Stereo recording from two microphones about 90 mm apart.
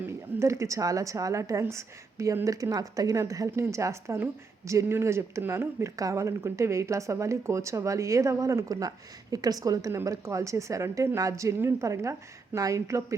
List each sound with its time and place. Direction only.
0.0 s speech: 30° right (ahead or behind)